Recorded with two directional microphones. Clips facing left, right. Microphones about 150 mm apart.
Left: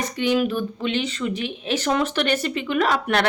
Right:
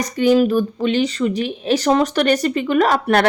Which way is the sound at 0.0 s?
40° right (ahead or behind).